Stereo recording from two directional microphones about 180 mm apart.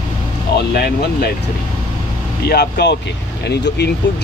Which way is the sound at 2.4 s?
65° left (ahead or behind).